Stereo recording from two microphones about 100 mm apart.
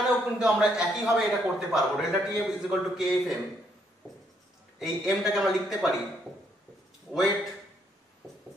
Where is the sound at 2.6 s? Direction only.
5° right (ahead or behind).